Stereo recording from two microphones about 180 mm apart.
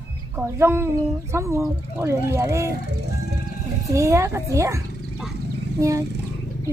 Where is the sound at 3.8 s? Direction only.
15° right (ahead or behind).